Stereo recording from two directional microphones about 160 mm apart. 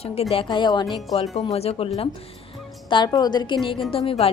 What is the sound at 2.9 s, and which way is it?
A woman's voice, 25° left (ahead or behind).